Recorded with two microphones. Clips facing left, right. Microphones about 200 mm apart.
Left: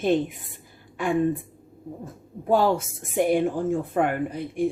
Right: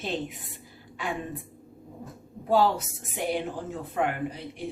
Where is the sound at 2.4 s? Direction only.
50° left (ahead or behind).